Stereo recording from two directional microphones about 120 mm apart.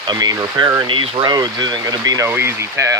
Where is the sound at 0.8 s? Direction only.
45° right (ahead or behind).